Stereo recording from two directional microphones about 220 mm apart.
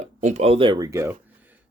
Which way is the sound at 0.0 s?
35° right (ahead or behind).